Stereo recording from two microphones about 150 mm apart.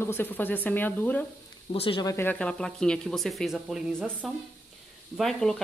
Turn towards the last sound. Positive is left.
turn(degrees=0)  # may be behind; listen again after turning